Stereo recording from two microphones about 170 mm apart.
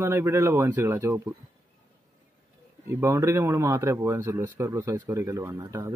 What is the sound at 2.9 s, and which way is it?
Speech, 15° right (ahead or behind).